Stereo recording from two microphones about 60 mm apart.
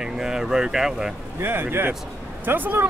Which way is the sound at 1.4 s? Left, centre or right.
Right.